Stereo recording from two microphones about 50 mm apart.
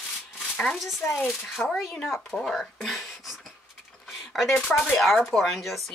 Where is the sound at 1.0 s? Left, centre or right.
Left.